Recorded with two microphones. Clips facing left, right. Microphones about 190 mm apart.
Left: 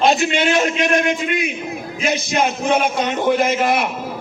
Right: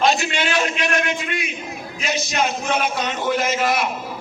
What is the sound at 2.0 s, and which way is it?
A man's voice, 55° left (ahead or behind).